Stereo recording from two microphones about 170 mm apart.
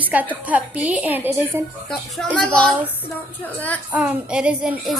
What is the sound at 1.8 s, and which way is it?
A woman's voice, centre (ahead or behind).